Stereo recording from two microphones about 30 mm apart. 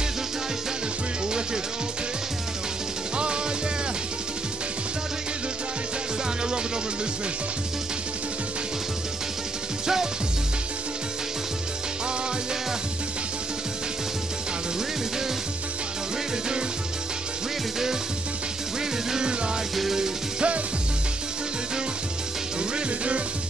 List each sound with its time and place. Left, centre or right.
19.7 s music: centre
20.3 s music: right
22.6 s music: right